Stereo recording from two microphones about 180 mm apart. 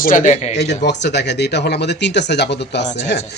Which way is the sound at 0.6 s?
70° left (ahead or behind).